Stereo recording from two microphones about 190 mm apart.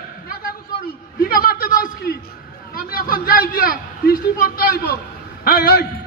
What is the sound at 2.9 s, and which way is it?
Speech, 50° left (ahead or behind).